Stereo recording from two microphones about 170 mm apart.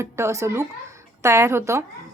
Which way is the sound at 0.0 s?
15° right (ahead or behind).